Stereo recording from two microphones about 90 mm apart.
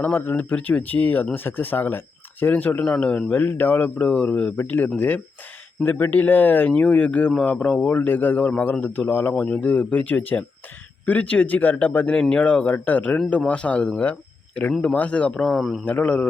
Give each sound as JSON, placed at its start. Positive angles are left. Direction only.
{"t": 0.0, "sound": "speech", "side_deg": 20}
{"t": 9.3, "sound": "a man's voice", "side_deg": 15}
{"t": 15.9, "sound": "a man's voice", "side_deg": 15}